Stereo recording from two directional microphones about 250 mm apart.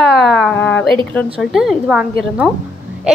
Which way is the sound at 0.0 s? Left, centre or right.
Centre.